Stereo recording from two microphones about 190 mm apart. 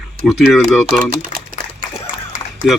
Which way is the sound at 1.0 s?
45° right (ahead or behind).